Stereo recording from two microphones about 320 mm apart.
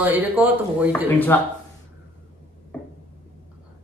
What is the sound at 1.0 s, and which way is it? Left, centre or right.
Speech, centre.